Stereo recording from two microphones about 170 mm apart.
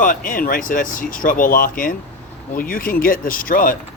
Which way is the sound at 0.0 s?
50° left (ahead or behind).